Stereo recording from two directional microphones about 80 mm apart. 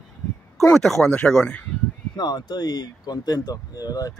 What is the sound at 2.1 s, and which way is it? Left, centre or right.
Speech, left.